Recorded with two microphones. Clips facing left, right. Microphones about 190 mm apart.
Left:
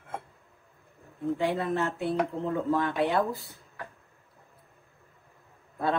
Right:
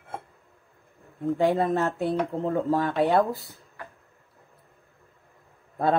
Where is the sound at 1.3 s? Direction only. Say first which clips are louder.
Right 6 dB; 45° right (ahead or behind).